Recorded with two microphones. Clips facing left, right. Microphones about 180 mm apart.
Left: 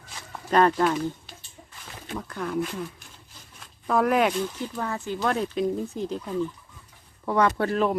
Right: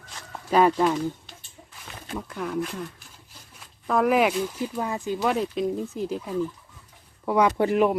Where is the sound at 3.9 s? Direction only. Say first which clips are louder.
Right 1 dB; centre (ahead or behind).